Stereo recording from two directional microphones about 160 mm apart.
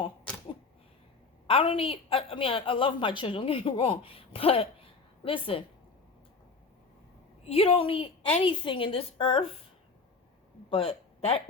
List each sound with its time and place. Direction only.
1.5 s a woman's voice: 35° left (ahead or behind)
7.4 s a woman's voice: 35° left (ahead or behind)
10.7 s a man's voice: 40° left (ahead or behind)